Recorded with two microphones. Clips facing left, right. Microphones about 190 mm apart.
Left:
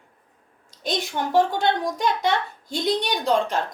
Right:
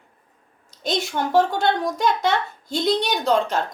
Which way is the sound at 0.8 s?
15° left (ahead or behind).